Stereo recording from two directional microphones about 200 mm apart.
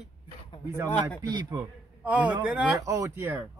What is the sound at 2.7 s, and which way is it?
Speech, 15° right (ahead or behind).